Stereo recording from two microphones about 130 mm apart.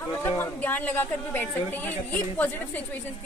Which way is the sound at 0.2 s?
15° left (ahead or behind).